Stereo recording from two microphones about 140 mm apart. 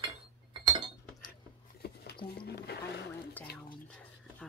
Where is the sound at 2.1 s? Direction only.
90° left.